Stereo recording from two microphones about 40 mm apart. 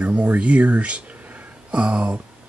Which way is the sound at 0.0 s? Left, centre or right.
Right.